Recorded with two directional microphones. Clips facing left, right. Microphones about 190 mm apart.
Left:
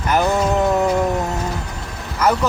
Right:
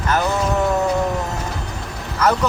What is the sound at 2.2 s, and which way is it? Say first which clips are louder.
Speech: even; 10° left (ahead or behind).